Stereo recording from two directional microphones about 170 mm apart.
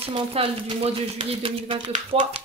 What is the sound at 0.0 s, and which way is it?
Speech, 35° right (ahead or behind).